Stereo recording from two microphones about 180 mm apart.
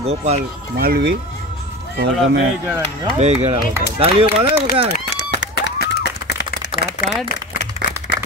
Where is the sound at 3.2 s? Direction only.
35° right (ahead or behind).